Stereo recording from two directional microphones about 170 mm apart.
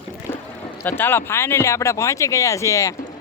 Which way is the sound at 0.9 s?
10° left (ahead or behind).